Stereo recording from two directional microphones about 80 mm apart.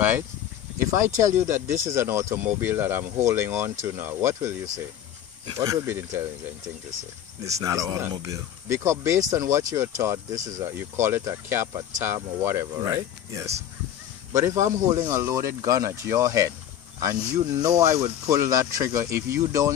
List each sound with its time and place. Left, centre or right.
0.8 s speech: right
5.9 s speech: right
7.6 s speech: right
15.3 s speech: right